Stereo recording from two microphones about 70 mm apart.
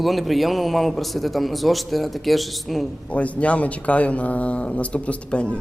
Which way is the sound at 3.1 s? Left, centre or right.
Centre.